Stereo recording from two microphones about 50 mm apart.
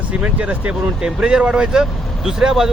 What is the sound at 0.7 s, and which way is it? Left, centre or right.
Speech, centre.